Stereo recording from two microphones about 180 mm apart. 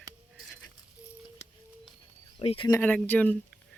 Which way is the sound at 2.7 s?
10° left (ahead or behind).